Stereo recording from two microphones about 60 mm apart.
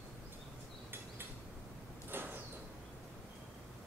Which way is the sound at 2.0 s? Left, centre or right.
Right.